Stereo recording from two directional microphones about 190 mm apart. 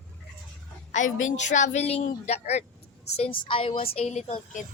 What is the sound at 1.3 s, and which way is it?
Speech, 40° left (ahead or behind).